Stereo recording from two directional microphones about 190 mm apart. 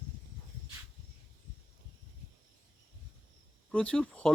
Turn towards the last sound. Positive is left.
turn(degrees=5)  # may be behind; listen again after turning